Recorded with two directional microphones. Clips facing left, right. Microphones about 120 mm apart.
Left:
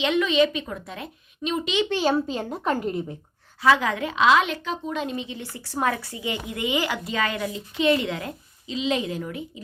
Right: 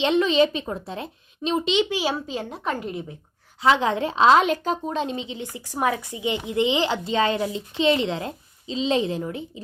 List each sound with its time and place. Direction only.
0.0 s a woman's voice: 30° right (ahead or behind)
1.9 s a child's voice: 5° right (ahead or behind)
3.6 s a woman's voice: 25° right (ahead or behind)